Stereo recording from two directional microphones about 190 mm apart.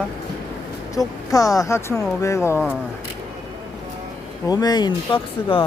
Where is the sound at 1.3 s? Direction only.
15° left (ahead or behind).